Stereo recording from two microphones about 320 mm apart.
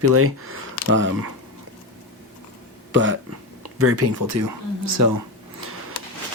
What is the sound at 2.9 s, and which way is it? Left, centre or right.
Speech, right.